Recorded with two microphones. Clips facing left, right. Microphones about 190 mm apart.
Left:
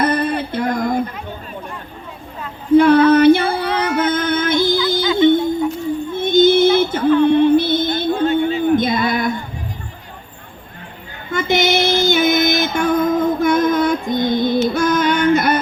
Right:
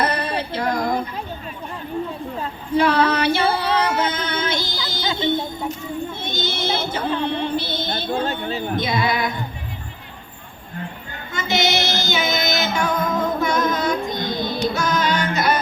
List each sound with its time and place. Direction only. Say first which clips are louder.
0.0 s music: left 5 dB; 50° left (ahead or behind)
2.7 s a sound: left 8 dB; 55° left (ahead or behind)
3.7 s music: left 2 dB; 30° right (ahead or behind)
4.1 s music: left 7 dB; 55° left (ahead or behind)
5.1 s a sound: left 10 dB; 50° left (ahead or behind)
8.2 s a sound: left 8 dB; 35° right (ahead or behind)
8.7 s music: left 6 dB; 50° left (ahead or behind)
11.3 s music: left 5 dB; 55° left (ahead or behind)
14.7 s child singing: left 5 dB; 55° left (ahead or behind)